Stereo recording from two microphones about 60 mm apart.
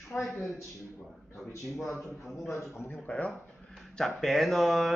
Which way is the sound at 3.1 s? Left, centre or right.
Left.